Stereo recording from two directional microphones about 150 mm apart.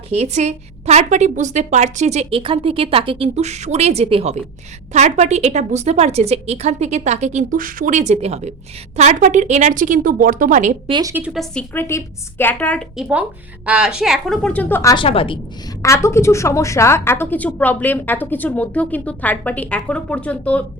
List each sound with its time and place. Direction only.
0.1 s a woman's voice: 45° right (ahead or behind)
2.4 s a woman's voice: 35° right (ahead or behind); by 10.8 s 55° right (ahead or behind)
11.0 s a woman's voice: 15° right (ahead or behind)
11.3 s a woman's voice: centre (ahead or behind)
11.7 s a woman's voice: 15° left (ahead or behind)
13.0 s a woman's voice: 10° right (ahead or behind); by 14.9 s 15° left (ahead or behind)
14.9 s a woman's voice: 40° left (ahead or behind)
15.8 s a woman's voice: 20° left (ahead or behind)